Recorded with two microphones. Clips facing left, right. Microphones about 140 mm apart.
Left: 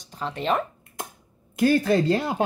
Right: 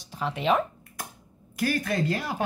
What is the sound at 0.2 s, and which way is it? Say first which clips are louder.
Speech: right 1 dB; 5° right (ahead or behind).